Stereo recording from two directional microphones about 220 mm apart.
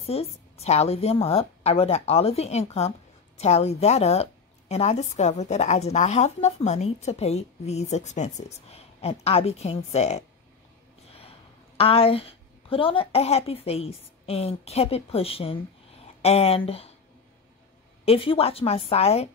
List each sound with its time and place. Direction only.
0.0 s a woman's voice: 30° left (ahead or behind)
18.0 s a woman's voice: 25° left (ahead or behind)